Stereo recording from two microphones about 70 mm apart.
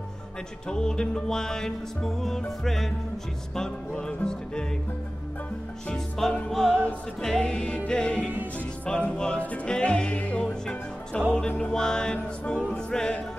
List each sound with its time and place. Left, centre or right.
0.7 s music: centre
3.9 s music: centre
5.9 s music: centre
6.7 s music: left
7.2 s music: centre
10.4 s speech: centre
11.3 s music: centre